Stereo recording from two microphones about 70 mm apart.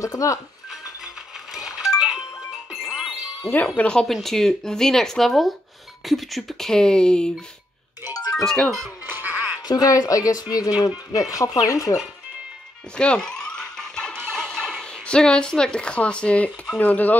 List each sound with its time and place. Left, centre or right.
0.0 s speech: left
0.7 s music: centre
3.6 s speech: centre
8.0 s music: left
8.4 s speech: centre
9.0 s music: right
9.6 s speech: left
12.9 s music: centre
16.7 s speech: left